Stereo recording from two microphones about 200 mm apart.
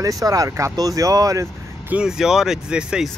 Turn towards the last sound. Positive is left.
turn(degrees=-5)  # may be behind; listen again after turning